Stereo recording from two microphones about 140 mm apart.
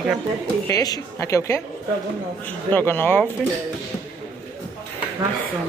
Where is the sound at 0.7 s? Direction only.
25° left (ahead or behind).